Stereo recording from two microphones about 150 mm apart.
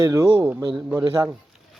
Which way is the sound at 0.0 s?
25° right (ahead or behind).